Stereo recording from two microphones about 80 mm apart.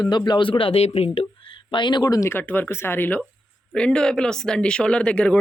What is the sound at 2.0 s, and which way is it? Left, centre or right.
Speech, left.